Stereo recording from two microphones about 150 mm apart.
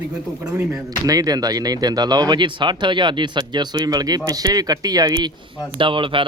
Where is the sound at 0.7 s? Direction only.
25° right (ahead or behind).